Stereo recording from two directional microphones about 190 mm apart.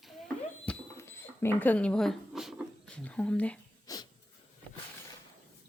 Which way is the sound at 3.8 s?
20° left (ahead or behind).